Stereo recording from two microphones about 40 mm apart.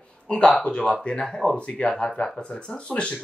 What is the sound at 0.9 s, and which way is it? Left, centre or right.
Speech, left.